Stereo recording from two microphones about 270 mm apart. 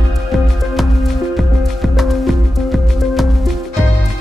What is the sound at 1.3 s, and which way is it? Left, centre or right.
Music, centre.